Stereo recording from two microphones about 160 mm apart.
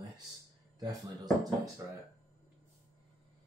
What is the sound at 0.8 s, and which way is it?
Speech, 25° right (ahead or behind).